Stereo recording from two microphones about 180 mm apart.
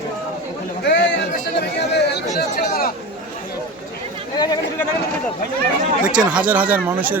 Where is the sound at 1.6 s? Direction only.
70° left (ahead or behind).